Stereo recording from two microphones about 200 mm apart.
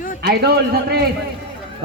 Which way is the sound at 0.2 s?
55° right (ahead or behind).